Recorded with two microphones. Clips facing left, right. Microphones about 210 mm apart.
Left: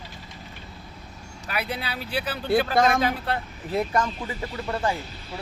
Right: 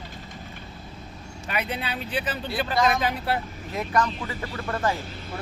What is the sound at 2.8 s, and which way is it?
Speech, 50° left (ahead or behind).